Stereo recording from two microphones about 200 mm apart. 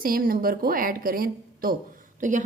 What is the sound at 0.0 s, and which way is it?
A woman's voice, 45° right (ahead or behind).